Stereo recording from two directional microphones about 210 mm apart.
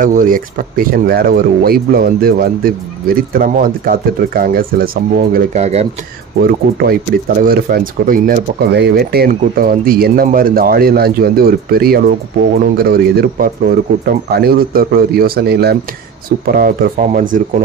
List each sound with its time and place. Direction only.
0.0 s speech: 40° right (ahead or behind)
6.4 s speech: 50° right (ahead or behind)